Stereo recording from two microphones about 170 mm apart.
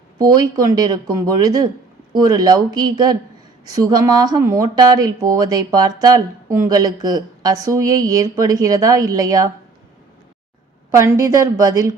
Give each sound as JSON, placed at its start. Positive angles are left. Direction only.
{"t": 0.2, "sound": "speech", "side_deg": -25}
{"t": 10.9, "sound": "speech", "side_deg": -15}